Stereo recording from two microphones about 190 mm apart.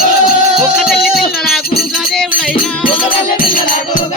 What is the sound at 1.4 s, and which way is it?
Music, centre (ahead or behind).